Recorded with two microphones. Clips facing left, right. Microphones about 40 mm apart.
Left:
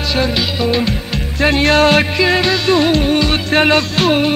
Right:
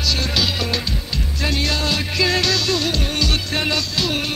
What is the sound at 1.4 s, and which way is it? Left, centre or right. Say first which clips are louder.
Music: left 11 dB; left.